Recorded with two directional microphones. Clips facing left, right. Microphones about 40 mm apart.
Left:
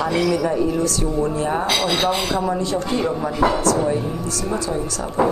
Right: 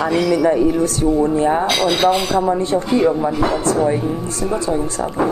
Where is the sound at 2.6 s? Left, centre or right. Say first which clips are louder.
Right 4 dB; right.